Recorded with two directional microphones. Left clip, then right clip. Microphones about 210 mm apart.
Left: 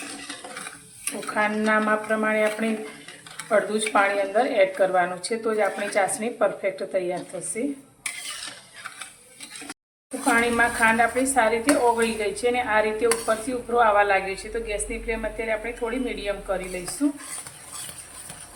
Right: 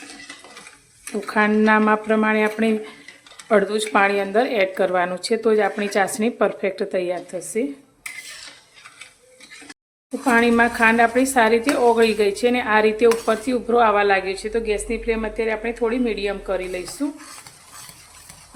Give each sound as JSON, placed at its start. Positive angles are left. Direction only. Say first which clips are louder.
{"t": 1.3, "sound": "speech", "louder": "right 5 dB", "side_deg": -55}
{"t": 10.2, "sound": "speech", "louder": "right 4 dB", "side_deg": -55}